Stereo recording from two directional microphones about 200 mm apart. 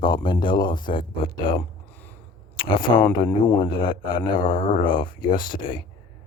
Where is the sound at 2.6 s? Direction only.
25° left (ahead or behind).